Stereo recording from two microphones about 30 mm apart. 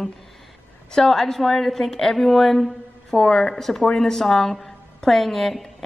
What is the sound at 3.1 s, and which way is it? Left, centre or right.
Speech, left.